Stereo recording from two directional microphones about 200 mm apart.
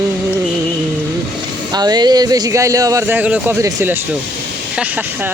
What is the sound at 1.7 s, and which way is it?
Speech, 20° right (ahead or behind).